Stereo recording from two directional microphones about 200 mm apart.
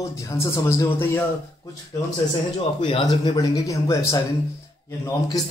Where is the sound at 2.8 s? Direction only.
25° left (ahead or behind).